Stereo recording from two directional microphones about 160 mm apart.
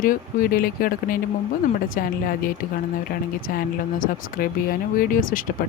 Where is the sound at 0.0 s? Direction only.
60° left (ahead or behind).